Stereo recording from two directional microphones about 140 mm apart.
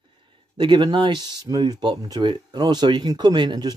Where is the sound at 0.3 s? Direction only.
35° right (ahead or behind).